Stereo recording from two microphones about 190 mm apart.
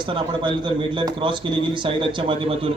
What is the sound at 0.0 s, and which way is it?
Speech, 25° right (ahead or behind).